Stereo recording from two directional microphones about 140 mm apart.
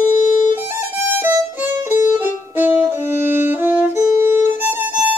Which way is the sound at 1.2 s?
15° right (ahead or behind).